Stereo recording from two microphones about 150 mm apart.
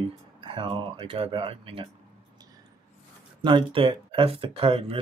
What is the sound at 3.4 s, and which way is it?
Speech, 35° right (ahead or behind).